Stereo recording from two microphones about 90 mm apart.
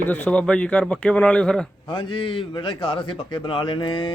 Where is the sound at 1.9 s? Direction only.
65° left (ahead or behind).